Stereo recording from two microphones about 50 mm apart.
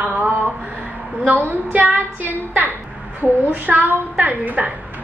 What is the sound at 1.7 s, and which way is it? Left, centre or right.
A woman's voice, right.